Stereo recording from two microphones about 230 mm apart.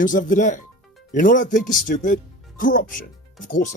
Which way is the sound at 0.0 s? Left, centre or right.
Left.